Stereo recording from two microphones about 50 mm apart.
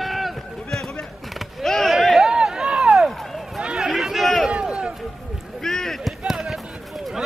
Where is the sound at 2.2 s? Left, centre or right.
Centre.